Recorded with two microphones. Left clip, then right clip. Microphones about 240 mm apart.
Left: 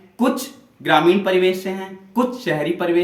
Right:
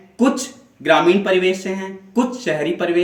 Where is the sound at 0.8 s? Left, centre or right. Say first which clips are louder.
Right 1 dB; centre.